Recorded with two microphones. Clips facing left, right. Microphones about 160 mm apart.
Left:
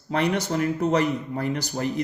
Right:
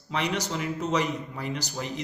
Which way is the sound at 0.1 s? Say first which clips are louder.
Left 5 dB; 55° left (ahead or behind).